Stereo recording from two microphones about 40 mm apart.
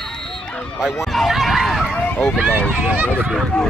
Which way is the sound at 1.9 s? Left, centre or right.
Left.